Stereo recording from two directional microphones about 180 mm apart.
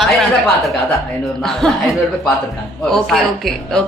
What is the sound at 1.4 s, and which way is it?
Speech, centre (ahead or behind).